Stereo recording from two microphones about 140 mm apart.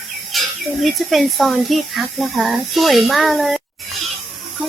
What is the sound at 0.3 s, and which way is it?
Speech, centre (ahead or behind).